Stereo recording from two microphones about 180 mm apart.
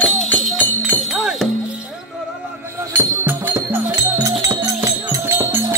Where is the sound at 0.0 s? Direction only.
Centre (ahead or behind).